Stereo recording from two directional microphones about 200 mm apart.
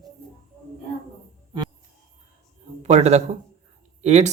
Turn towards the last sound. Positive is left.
turn(degrees=-35)  # may be behind; listen again after turning